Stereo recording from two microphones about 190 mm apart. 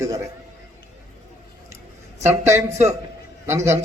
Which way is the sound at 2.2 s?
15° right (ahead or behind).